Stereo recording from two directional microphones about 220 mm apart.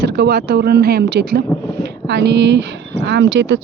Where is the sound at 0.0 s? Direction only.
45° right (ahead or behind).